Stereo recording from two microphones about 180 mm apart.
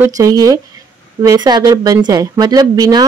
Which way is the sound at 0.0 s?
20° right (ahead or behind).